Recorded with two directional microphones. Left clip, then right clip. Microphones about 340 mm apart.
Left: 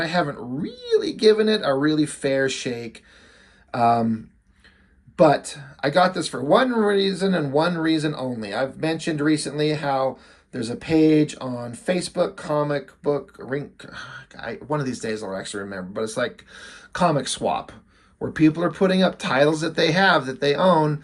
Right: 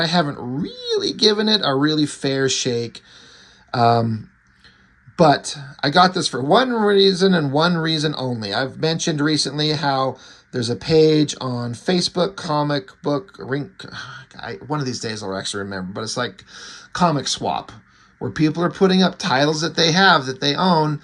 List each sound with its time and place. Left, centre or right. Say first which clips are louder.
0.0 s speech: right 3 dB; centre
5.1 s speech: right 2 dB; centre